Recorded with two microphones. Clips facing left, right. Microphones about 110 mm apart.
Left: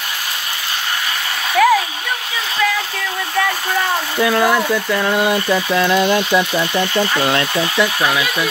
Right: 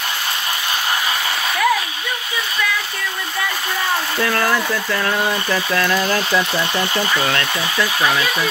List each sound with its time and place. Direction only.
1.6 s hair dryer: 90° left
4.2 s speech: 10° left (ahead or behind)